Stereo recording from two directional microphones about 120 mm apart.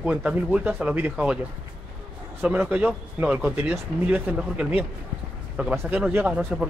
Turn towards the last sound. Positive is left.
turn(degrees=-10)  # may be behind; listen again after turning